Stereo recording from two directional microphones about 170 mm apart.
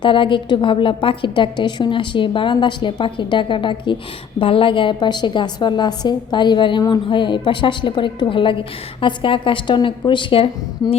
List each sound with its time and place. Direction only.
0.0 s a woman's voice: 30° left (ahead or behind)